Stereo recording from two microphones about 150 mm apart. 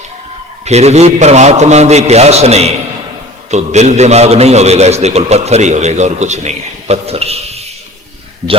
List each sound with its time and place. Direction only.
0.6 s a man's voice: 45° right (ahead or behind)